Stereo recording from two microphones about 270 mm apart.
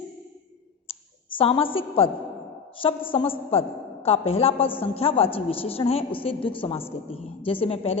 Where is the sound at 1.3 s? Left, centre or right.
Centre.